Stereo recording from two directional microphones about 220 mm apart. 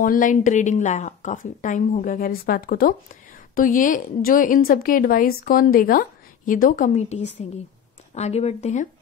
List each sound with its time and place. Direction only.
0.0 s a woman's voice: 35° left (ahead or behind)